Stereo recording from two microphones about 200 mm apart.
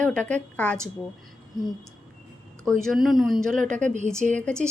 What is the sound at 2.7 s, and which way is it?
Speech, centre (ahead or behind).